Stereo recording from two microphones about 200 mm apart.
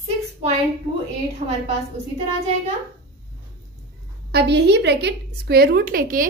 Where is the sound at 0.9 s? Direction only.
30° right (ahead or behind).